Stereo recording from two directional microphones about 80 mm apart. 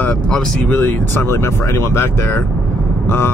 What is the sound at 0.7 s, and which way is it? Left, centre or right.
Speech, left.